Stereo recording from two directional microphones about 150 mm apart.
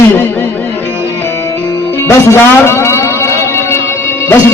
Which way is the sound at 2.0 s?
20° left (ahead or behind).